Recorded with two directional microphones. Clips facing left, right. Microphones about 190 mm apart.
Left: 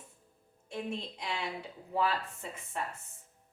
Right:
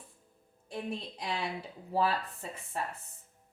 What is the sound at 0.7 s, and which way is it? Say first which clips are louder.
Speech: even; 35° right (ahead or behind).